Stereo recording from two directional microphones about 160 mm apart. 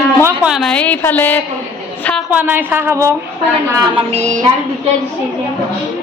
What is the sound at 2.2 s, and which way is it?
A woman's voice, 10° right (ahead or behind).